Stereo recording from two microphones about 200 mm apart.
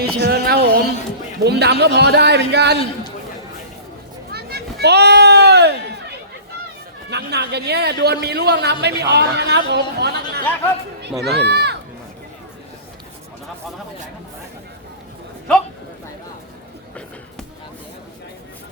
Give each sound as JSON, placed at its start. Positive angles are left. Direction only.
{"t": 0.0, "sound": "a man's voice", "side_deg": -50}
{"t": 4.3, "sound": "children playing", "side_deg": -50}
{"t": 7.1, "sound": "a man's voice", "side_deg": -55}